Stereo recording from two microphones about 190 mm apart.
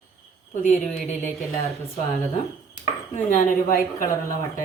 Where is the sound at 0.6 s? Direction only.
40° left (ahead or behind).